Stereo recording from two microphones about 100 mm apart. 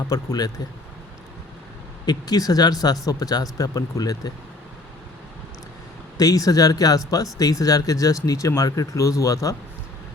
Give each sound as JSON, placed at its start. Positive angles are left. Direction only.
{"t": 0.1, "sound": "speech", "side_deg": 40}
{"t": 2.0, "sound": "speech", "side_deg": 40}
{"t": 6.1, "sound": "speech", "side_deg": 35}